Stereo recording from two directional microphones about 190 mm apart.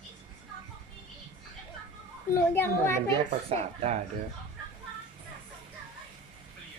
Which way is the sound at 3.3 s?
30° right (ahead or behind).